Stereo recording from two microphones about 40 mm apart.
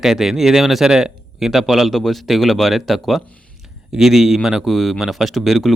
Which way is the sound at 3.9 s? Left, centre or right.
Centre.